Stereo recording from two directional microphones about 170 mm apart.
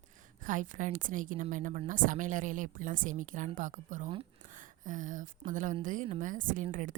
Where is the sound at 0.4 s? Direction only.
50° right (ahead or behind).